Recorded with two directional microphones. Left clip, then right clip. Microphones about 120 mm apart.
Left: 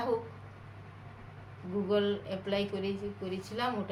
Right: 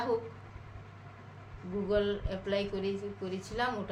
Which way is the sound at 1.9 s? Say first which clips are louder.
Even; 20° right (ahead or behind).